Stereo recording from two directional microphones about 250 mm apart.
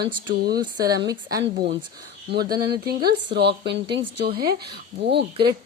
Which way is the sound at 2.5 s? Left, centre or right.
Right.